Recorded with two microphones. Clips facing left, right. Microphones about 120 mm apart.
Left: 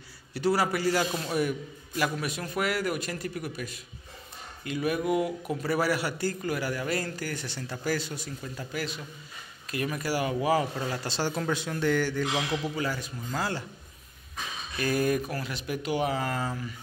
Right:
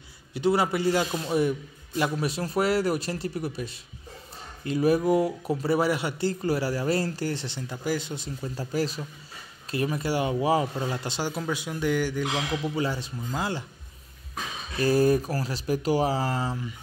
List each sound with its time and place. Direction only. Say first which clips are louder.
0.3 s speech: right 2 dB; 20° right (ahead or behind)
12.7 s speech: right 3 dB; 25° right (ahead or behind)
14.8 s speech: right 5 dB; 30° right (ahead or behind)